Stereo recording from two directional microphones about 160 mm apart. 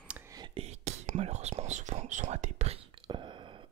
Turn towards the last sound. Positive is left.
turn(degrees=-30)  # may be behind; listen again after turning